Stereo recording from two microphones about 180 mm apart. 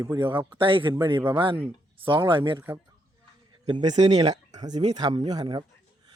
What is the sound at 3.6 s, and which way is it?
A man's voice, 25° right (ahead or behind).